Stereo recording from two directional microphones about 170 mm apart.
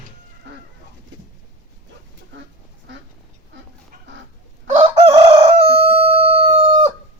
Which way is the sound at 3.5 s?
90° right.